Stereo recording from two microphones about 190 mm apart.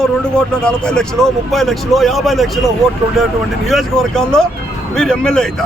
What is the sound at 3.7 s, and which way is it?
Speech, centre (ahead or behind).